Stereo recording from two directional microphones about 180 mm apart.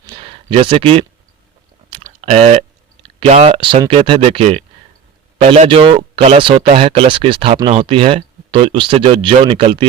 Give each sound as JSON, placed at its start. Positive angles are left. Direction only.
{"t": 0.0, "sound": "a sound", "side_deg": -30}
{"t": 0.5, "sound": "speech", "side_deg": -30}
{"t": 2.2, "sound": "speech", "side_deg": -40}